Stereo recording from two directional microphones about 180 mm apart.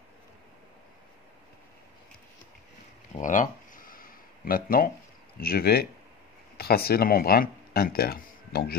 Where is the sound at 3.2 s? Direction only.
45° left (ahead or behind).